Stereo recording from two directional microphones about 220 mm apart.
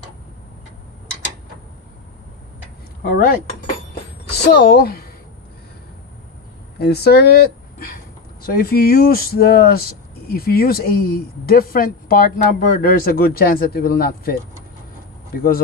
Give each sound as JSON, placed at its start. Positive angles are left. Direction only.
{"t": 3.0, "sound": "speech", "side_deg": 40}
{"t": 6.8, "sound": "speech", "side_deg": 45}